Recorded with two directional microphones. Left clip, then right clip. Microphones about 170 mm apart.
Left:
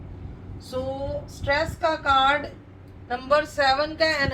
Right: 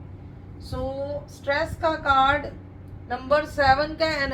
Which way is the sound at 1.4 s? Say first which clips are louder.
Left 1 dB; 15° right (ahead or behind).